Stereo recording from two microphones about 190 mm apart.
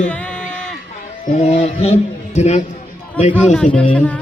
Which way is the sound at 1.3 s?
40° left (ahead or behind).